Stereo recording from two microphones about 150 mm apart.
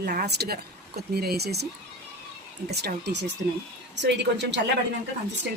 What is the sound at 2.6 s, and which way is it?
Speech, 90° right.